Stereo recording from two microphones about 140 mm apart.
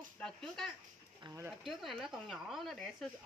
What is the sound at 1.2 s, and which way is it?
Speech, 20° right (ahead or behind).